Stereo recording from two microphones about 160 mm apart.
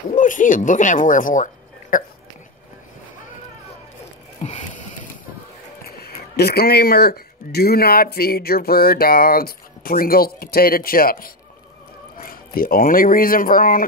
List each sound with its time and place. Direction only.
0.1 s speech: 55° left (ahead or behind)
4.4 s music: 50° left (ahead or behind)
5.9 s speech: 75° left (ahead or behind); by 13.8 s 60° left (ahead or behind)